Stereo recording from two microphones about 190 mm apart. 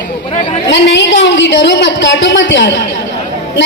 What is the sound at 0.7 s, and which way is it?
A woman's voice, 65° left (ahead or behind).